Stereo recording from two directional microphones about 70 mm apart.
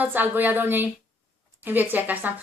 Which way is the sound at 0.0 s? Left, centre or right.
Right.